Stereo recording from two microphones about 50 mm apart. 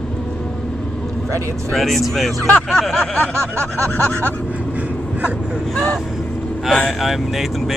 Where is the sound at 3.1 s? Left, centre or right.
Left.